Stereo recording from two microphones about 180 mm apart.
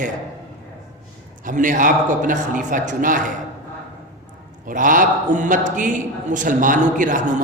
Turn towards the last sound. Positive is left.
turn(degrees=-45)  # may be behind; listen again after turning